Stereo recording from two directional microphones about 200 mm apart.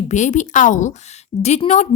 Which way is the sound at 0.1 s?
35° left (ahead or behind).